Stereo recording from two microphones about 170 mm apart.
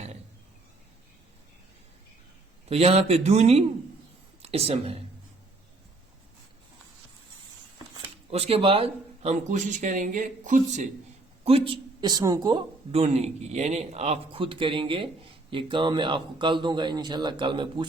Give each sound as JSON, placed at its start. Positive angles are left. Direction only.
{"t": 2.6, "sound": "a woman's voice", "side_deg": -35}
{"t": 8.3, "sound": "speech", "side_deg": -35}
{"t": 11.4, "sound": "speech", "side_deg": -35}
{"t": 12.9, "sound": "speech", "side_deg": -35}